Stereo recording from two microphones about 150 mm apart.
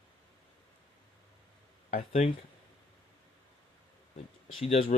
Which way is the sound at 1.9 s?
60° left (ahead or behind).